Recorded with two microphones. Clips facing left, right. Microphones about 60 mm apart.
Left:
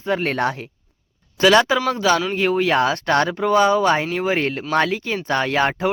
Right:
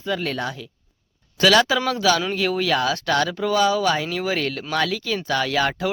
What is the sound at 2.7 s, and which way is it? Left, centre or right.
Speech, left.